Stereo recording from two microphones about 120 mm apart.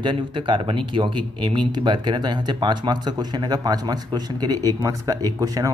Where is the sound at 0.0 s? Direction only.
40° right (ahead or behind).